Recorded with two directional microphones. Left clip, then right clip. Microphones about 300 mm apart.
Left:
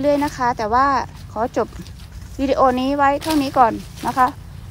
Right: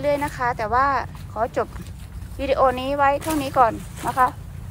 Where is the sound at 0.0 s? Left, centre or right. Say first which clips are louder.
Left 4 dB; left.